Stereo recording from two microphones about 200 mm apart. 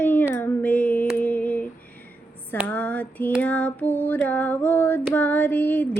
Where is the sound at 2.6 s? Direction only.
5° left (ahead or behind).